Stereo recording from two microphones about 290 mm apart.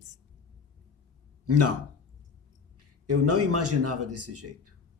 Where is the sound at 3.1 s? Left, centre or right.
Right.